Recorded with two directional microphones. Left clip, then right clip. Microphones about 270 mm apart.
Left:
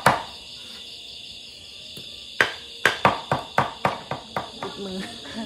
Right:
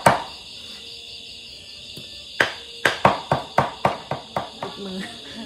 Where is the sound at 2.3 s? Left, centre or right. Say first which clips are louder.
Right 1 dB; centre.